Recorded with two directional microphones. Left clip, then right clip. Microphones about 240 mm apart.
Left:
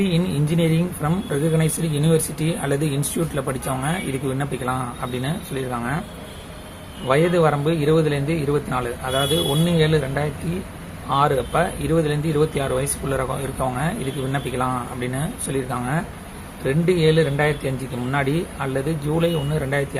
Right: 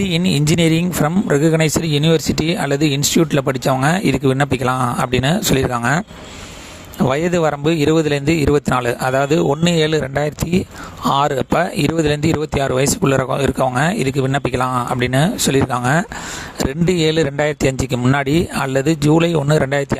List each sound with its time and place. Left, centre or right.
0.0 s speech: right
7.1 s speech: right